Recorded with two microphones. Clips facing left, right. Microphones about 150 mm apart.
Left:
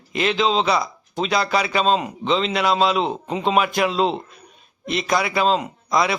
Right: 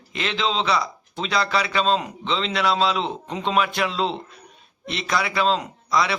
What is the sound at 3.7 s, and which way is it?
Speech, 40° left (ahead or behind).